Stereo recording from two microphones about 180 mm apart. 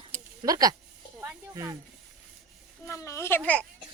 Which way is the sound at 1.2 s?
15° right (ahead or behind).